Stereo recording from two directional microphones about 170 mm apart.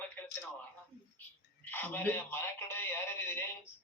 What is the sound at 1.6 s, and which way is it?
Speech, 10° left (ahead or behind).